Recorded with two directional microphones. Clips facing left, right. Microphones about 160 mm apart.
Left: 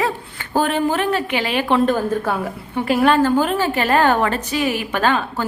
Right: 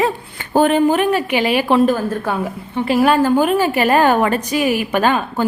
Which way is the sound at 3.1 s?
10° right (ahead or behind).